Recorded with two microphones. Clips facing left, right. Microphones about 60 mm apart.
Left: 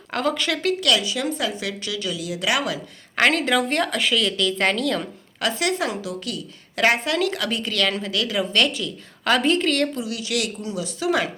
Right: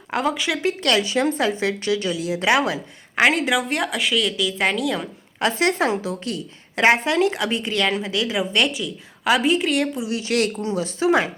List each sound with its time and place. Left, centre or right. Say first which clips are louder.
0.1 s a woman's voice: right 1 dB; centre
0.7 s a woman's voice: right 1 dB; right
3.2 s a woman's voice: right 1 dB; centre
5.4 s a woman's voice: right 3 dB; right; by 10.1 s centre
10.1 s a woman's voice: right 5 dB; right